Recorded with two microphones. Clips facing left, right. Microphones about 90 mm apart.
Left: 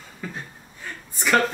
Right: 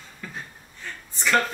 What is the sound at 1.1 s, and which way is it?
Speech, 10° left (ahead or behind).